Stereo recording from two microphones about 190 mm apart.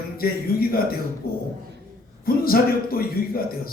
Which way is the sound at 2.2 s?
50° left (ahead or behind).